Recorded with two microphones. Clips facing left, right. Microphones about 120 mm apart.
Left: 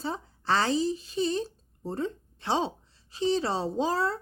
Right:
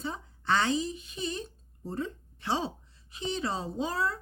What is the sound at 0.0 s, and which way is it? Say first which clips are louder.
A woman's voice: left 3 dB; 35° left (ahead or behind).